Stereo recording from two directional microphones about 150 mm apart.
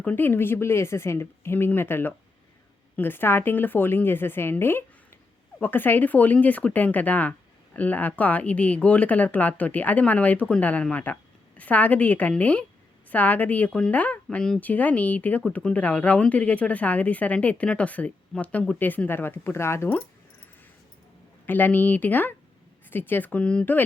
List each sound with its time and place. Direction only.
0.0 s speech: 10° left (ahead or behind)
21.4 s speech: 10° left (ahead or behind)